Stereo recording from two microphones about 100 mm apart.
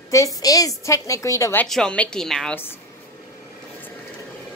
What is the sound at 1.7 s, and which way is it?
Speech, 10° left (ahead or behind).